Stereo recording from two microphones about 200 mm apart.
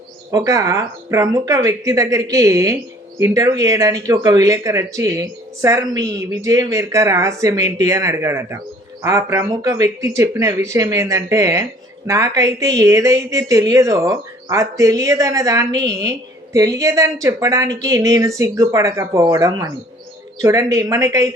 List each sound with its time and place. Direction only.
0.3 s speech: 15° right (ahead or behind)